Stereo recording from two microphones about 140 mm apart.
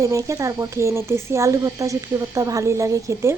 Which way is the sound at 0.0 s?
20° right (ahead or behind).